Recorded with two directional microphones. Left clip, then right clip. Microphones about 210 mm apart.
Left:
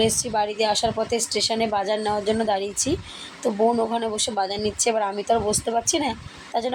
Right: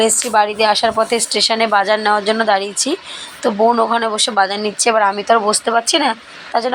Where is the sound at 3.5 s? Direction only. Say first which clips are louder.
Right 8 dB; 15° right (ahead or behind).